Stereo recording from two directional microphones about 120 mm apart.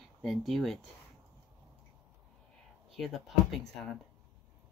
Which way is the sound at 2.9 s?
Centre (ahead or behind).